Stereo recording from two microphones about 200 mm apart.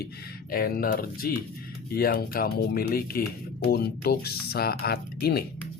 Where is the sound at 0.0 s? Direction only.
50° left (ahead or behind).